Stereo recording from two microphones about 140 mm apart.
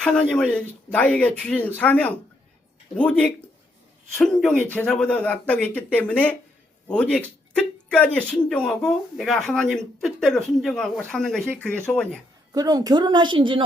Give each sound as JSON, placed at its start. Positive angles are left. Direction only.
{"t": 0.0, "sound": "speech", "side_deg": 5}
{"t": 12.5, "sound": "a woman's voice", "side_deg": -25}